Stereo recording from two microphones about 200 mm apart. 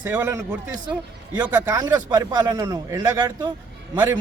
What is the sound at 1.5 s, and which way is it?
A man's voice, 20° right (ahead or behind).